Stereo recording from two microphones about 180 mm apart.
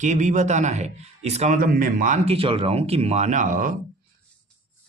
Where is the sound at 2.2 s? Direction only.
30° right (ahead or behind); by 3.7 s 45° right (ahead or behind).